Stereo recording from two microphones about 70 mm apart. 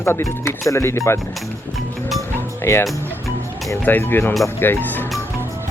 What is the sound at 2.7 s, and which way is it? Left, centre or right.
Speech, left.